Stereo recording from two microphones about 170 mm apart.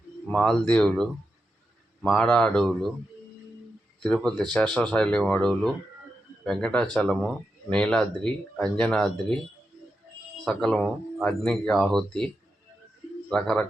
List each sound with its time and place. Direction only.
0.3 s speech: centre (ahead or behind)
4.0 s speech: 5° left (ahead or behind)
10.4 s speech: 5° left (ahead or behind)
13.3 s speech: 5° left (ahead or behind)